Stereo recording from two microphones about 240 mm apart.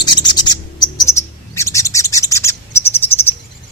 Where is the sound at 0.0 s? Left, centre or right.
Centre.